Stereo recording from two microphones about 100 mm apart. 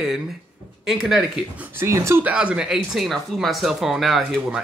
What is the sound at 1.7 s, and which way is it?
Speech, 30° right (ahead or behind).